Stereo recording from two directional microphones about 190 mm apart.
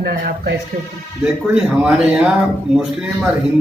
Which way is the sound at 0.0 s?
55° right (ahead or behind).